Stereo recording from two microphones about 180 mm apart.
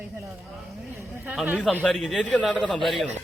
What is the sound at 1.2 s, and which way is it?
A man's voice, 10° right (ahead or behind).